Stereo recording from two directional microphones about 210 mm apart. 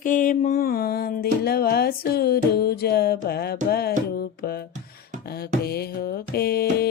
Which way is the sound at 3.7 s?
50° left (ahead or behind).